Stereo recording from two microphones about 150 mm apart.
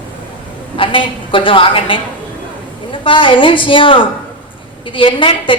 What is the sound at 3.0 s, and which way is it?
A woman's voice, 35° left (ahead or behind).